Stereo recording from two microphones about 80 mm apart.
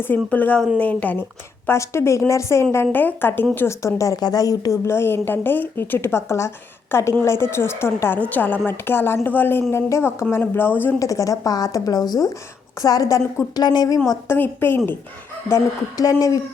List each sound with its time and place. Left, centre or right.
0.0 s a woman's voice: left
1.6 s a woman's voice: left
2.8 s a woman's voice: left
3.7 s a woman's voice: left
4.2 s speech: left
4.9 s a woman's voice: left
11.0 s speech: left
12.8 s a woman's voice: left
13.6 s a woman's voice: left
14.3 s a woman's voice: left
15.4 s speech: left